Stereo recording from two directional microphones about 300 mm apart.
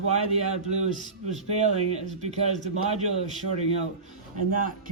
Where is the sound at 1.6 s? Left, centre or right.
Right.